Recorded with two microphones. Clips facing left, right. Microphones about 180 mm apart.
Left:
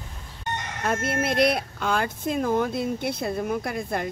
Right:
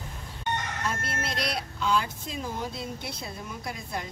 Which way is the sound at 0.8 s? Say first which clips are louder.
Left 7 dB; 55° left (ahead or behind).